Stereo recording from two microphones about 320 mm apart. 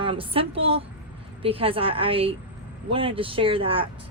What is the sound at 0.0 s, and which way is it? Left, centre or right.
Speech, centre.